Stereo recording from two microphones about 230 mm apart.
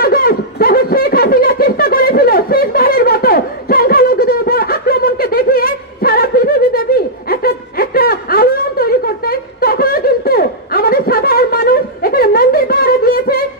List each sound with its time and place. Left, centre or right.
0.0 s snicker: left